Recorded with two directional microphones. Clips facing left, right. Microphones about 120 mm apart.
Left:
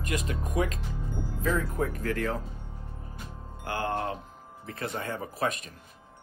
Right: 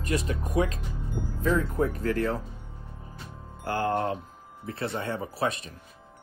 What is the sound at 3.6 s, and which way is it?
Speech, 40° right (ahead or behind).